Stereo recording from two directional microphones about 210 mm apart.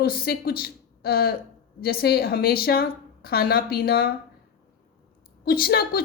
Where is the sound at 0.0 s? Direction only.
45° left (ahead or behind).